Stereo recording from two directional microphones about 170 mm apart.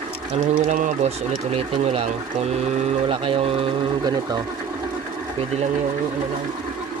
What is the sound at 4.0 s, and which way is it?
Speech, 25° right (ahead or behind).